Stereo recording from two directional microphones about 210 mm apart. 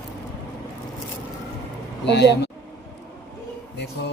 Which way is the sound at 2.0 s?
55° left (ahead or behind).